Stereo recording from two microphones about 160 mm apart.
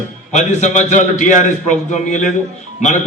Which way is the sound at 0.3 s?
50° left (ahead or behind).